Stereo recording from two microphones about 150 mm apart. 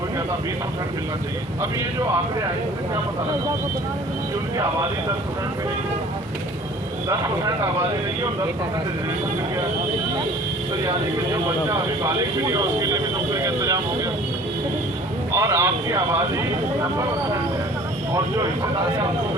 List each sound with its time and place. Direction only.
7.1 s speech: 20° right (ahead or behind)
11.7 s speech: 20° right (ahead or behind)
15.3 s speech: 20° right (ahead or behind)
18.1 s speech: 20° right (ahead or behind)